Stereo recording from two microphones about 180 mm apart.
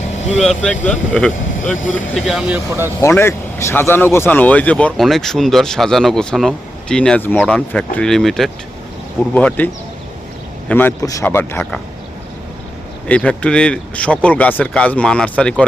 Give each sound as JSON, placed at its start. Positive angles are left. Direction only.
{"t": 0.2, "sound": "speech", "side_deg": 40}
{"t": 0.4, "sound": "speech", "side_deg": 5}
{"t": 0.8, "sound": "speech", "side_deg": 40}
{"t": 2.1, "sound": "speech", "side_deg": 0}
{"t": 2.6, "sound": "speech", "side_deg": -15}
{"t": 3.0, "sound": "speech", "side_deg": 15}
{"t": 10.7, "sound": "speech", "side_deg": 10}
{"t": 13.1, "sound": "speech", "side_deg": 5}